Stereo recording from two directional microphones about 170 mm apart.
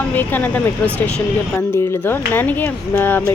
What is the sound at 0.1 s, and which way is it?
Speech, 10° left (ahead or behind).